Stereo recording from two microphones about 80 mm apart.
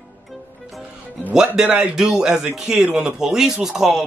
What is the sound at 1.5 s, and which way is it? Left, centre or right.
Speech, centre.